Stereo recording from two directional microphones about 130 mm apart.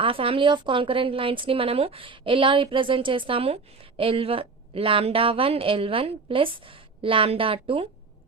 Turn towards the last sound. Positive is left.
turn(degrees=-45)  # may be behind; listen again after turning